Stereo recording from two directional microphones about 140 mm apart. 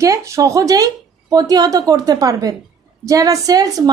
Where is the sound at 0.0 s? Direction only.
20° right (ahead or behind).